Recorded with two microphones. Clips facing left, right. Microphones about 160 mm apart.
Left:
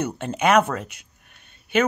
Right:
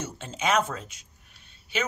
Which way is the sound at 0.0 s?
60° left (ahead or behind).